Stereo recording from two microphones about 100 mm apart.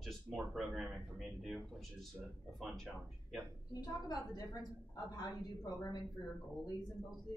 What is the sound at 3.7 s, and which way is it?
A woman's voice, 40° left (ahead or behind).